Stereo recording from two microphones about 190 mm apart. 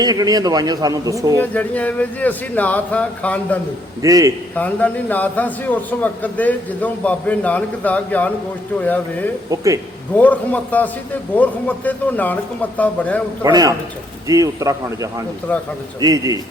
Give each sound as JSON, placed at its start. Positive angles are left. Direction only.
{"t": 0.0, "sound": "a man's voice", "side_deg": -20}
{"t": 1.4, "sound": "a man's voice", "side_deg": 10}
{"t": 4.0, "sound": "a man's voice", "side_deg": -15}
{"t": 4.5, "sound": "a man's voice", "side_deg": 10}
{"t": 11.9, "sound": "a man's voice", "side_deg": 10}
{"t": 13.4, "sound": "a man's voice", "side_deg": -20}